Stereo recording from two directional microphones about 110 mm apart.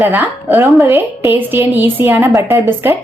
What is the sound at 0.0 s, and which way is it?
A woman's voice, 15° right (ahead or behind).